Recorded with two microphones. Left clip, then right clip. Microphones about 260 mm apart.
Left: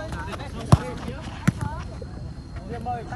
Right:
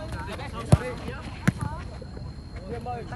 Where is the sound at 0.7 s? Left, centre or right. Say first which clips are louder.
Left 3 dB; centre.